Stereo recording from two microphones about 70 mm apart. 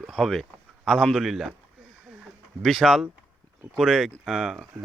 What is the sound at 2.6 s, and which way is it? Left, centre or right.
Speech, centre.